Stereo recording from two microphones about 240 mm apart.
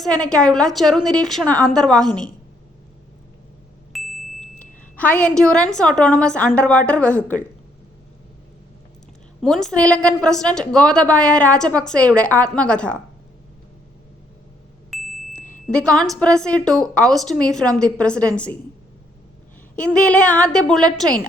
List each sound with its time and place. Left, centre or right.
0.0 s a woman's voice: centre
3.9 s ding: centre
4.6 s a woman's voice: centre
9.4 s a woman's voice: centre
14.8 s a sound: centre
15.4 s a sound: left
15.7 s a woman's voice: centre
19.7 s a woman's voice: centre